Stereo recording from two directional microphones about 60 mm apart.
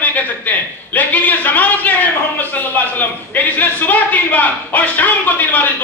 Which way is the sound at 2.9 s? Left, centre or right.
Left.